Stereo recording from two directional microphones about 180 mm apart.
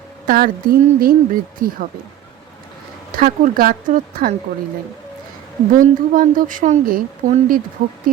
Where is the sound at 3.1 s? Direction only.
50° right (ahead or behind).